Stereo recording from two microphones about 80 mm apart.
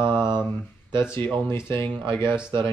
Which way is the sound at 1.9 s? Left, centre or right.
Right.